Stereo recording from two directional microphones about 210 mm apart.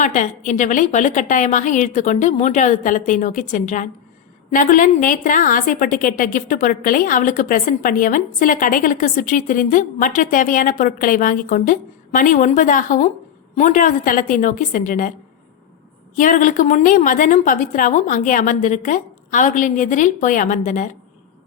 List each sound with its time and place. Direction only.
0.0 s a woman's voice: 35° left (ahead or behind)
16.1 s a woman's voice: 40° left (ahead or behind)